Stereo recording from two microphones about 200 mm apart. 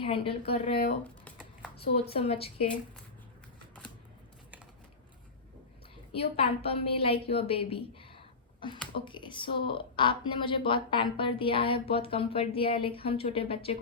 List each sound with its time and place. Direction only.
0.0 s speech: 25° left (ahead or behind)
2.0 s speech: 30° left (ahead or behind)
6.1 s speech: 30° left (ahead or behind)